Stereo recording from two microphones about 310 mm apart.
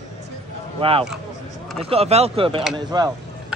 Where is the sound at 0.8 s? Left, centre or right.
Centre.